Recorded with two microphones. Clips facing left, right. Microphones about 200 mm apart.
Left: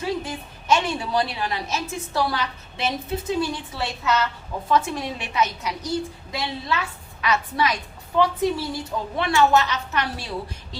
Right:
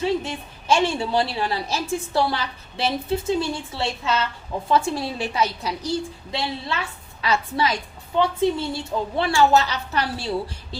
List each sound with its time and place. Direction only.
0.0 s a woman's voice: 25° right (ahead or behind)